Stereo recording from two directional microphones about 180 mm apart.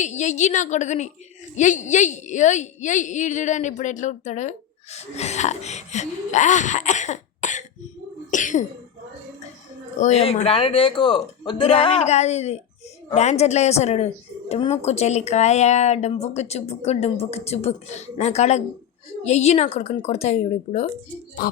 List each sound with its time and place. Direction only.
0.0 s a woman's voice: 40° left (ahead or behind)
8.3 s throat clearing: 45° left (ahead or behind)
10.0 s a woman's voice: 35° left (ahead or behind)